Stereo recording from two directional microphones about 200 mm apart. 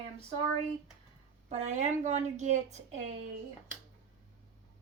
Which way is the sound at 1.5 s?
35° right (ahead or behind).